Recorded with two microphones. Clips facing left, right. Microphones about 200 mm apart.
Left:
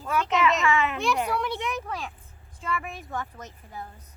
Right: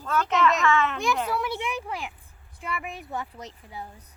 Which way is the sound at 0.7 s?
15° left (ahead or behind).